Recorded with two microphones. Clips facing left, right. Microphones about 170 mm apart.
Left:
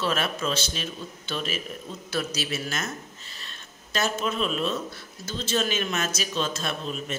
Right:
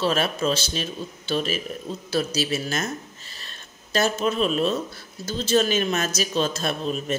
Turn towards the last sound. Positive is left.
turn(degrees=-40)  # may be behind; listen again after turning